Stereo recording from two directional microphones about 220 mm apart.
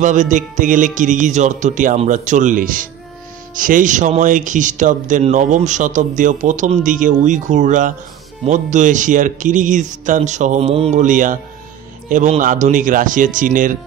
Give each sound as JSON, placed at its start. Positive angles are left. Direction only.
{"t": 0.0, "sound": "speech", "side_deg": -35}